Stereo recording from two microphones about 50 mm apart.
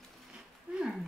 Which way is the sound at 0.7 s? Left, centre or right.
Right.